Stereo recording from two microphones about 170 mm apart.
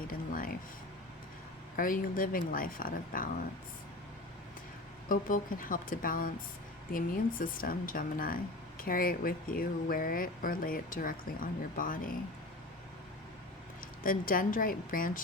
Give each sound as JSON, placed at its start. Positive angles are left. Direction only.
{"t": 0.1, "sound": "speech", "side_deg": 55}
{"t": 1.7, "sound": "speech", "side_deg": 55}
{"t": 5.0, "sound": "speech", "side_deg": 55}
{"t": 14.0, "sound": "speech", "side_deg": 55}